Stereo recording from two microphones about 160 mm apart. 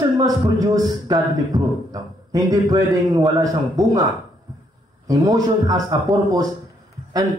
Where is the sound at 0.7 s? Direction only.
25° right (ahead or behind).